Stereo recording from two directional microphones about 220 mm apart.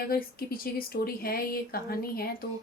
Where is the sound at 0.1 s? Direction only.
40° left (ahead or behind).